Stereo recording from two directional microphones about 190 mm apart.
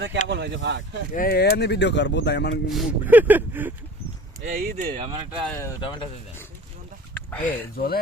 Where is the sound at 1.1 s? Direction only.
50° left (ahead or behind).